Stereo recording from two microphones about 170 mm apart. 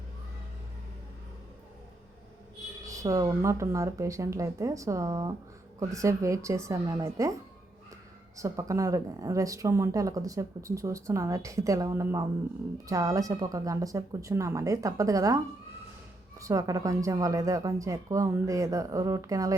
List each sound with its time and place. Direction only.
2.8 s a woman's voice: 20° right (ahead or behind)
8.4 s speech: 20° right (ahead or behind)
16.4 s speech: 20° right (ahead or behind)